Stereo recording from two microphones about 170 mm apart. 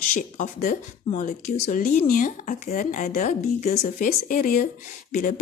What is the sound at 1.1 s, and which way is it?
A woman's voice, 50° left (ahead or behind).